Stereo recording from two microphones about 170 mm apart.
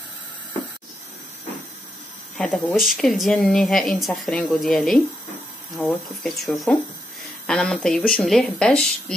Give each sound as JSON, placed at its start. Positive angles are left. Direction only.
{"t": 2.3, "sound": "speech", "side_deg": 5}